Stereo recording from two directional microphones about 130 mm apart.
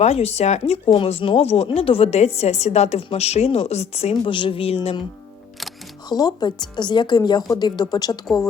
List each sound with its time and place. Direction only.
0.0 s speech: 55° left (ahead or behind)
0.9 s a woman's voice: 45° left (ahead or behind)
4.1 s a woman's voice: 40° left (ahead or behind)
6.1 s a woman's voice: 30° left (ahead or behind)